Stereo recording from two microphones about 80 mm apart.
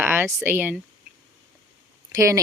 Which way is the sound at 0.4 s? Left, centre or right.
Right.